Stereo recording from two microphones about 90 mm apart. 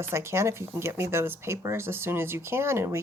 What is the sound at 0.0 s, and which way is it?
Speech, 30° right (ahead or behind).